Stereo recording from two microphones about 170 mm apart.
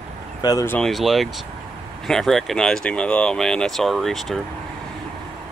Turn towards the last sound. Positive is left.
turn(degrees=0)  # may be behind; listen again after turning